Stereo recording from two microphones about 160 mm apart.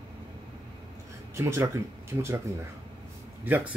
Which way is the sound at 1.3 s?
15° right (ahead or behind).